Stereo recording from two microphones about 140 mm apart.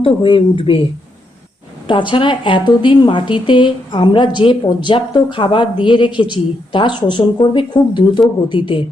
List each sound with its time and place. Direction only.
0.0 s speech: 40° left (ahead or behind)
1.9 s speech: 35° left (ahead or behind)